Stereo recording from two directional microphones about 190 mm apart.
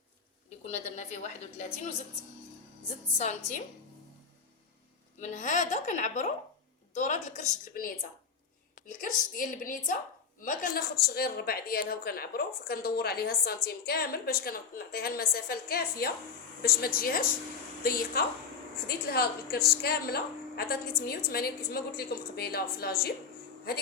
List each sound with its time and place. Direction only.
0.6 s a woman's voice: 35° left (ahead or behind)
3.2 s a woman's voice: 35° left (ahead or behind)
5.2 s a woman's voice: 40° left (ahead or behind); by 23.1 s 55° left (ahead or behind)